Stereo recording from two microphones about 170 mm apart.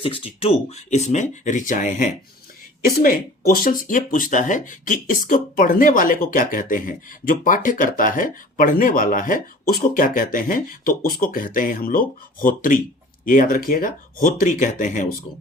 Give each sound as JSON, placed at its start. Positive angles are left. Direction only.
{"t": 0.0, "sound": "speech", "side_deg": 35}